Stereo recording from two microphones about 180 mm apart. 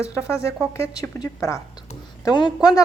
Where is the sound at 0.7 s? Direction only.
15° left (ahead or behind).